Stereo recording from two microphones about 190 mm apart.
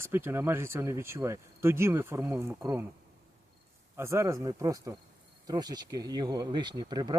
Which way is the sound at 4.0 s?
15° right (ahead or behind).